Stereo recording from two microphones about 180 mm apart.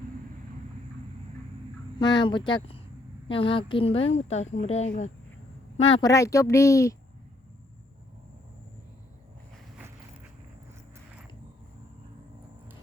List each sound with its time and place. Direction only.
2.0 s speech: 25° left (ahead or behind)
6.0 s speech: 20° left (ahead or behind)